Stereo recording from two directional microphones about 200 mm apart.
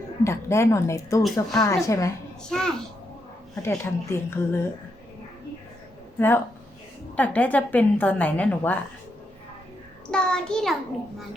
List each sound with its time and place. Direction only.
0.3 s a woman's voice: 15° left (ahead or behind)
1.2 s child singing: centre (ahead or behind)
1.6 s a woman's voice: 15° left (ahead or behind)
2.5 s child singing: 5° left (ahead or behind)
3.5 s a woman's voice: 15° left (ahead or behind)
6.1 s a woman's voice: 10° left (ahead or behind)
10.1 s child singing: 5° left (ahead or behind)